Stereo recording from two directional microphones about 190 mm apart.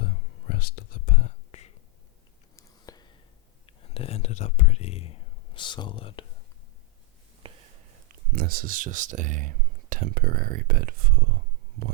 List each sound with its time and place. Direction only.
0.0 s whispering: 55° left (ahead or behind); by 1.7 s 35° left (ahead or behind)
2.6 s whispering: 20° left (ahead or behind)
3.7 s speech: 30° left (ahead or behind)
7.4 s whispering: 30° right (ahead or behind)
8.3 s speech: 50° right (ahead or behind)